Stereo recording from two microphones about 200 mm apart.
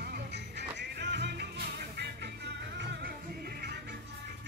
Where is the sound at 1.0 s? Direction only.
60° right (ahead or behind).